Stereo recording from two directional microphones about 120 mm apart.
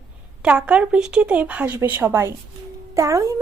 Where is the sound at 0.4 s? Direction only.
10° right (ahead or behind).